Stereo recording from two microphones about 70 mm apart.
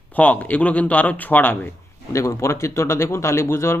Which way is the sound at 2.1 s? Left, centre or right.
Left.